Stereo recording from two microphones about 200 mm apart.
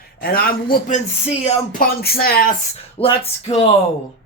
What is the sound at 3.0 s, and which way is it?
Speech, 30° left (ahead or behind).